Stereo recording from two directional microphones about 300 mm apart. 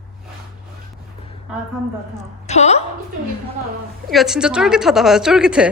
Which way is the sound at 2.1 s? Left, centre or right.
Left.